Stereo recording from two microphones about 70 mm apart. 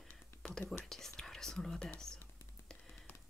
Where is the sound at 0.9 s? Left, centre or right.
Centre.